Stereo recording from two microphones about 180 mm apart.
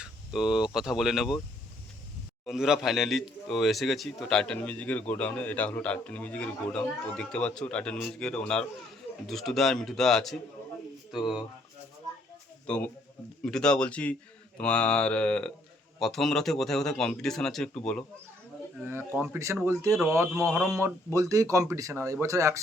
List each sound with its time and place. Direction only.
0.0 s speech: centre (ahead or behind)
2.5 s speech: centre (ahead or behind)
12.6 s a man's voice: 5° left (ahead or behind)
18.8 s speech: 10° right (ahead or behind)
20.5 s speech: centre (ahead or behind)
20.8 s speech: 20° right (ahead or behind)